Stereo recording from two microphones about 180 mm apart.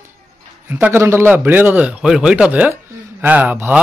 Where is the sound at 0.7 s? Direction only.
10° right (ahead or behind).